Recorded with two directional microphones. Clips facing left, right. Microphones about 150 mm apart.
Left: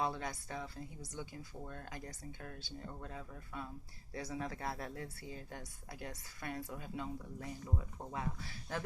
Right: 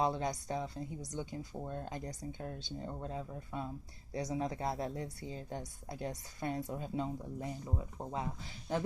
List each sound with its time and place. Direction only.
0.0 s speech: 20° right (ahead or behind)